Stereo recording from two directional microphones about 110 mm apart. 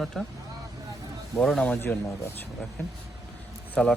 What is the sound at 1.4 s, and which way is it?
Speech, 5° left (ahead or behind).